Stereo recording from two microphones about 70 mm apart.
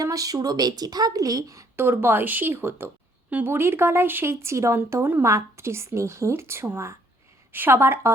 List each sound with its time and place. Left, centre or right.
0.0 s a woman's voice: right
1.7 s a woman's voice: right